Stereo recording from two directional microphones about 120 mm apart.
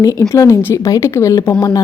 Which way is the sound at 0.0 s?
30° left (ahead or behind).